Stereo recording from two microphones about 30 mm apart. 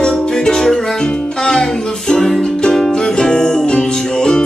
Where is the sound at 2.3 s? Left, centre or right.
Centre.